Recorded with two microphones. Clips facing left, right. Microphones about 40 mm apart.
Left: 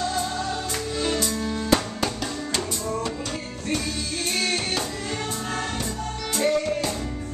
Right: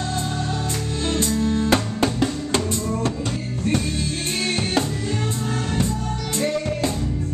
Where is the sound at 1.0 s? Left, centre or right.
Right.